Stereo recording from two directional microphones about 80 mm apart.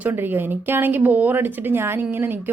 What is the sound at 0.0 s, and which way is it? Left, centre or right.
A woman's voice, right.